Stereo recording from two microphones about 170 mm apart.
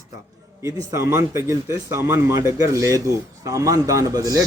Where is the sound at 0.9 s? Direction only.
15° right (ahead or behind).